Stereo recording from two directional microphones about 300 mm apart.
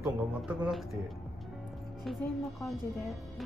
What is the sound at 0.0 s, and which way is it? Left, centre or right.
Speech, centre.